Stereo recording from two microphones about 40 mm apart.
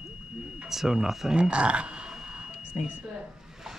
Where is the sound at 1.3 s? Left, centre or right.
Right.